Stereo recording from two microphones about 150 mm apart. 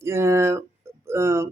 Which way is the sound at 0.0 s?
20° right (ahead or behind).